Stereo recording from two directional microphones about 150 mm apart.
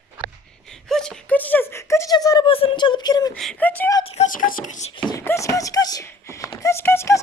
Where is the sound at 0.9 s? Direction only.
5° left (ahead or behind); by 2.5 s 25° left (ahead or behind).